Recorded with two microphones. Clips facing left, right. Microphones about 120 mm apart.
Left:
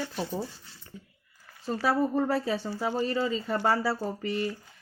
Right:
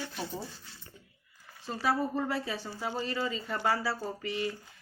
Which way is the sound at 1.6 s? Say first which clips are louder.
Left 4 dB; 45° left (ahead or behind).